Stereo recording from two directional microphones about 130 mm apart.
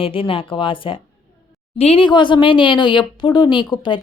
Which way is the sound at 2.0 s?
35° left (ahead or behind).